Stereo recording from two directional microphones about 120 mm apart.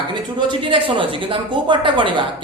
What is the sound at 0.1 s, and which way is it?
Speech, 40° right (ahead or behind).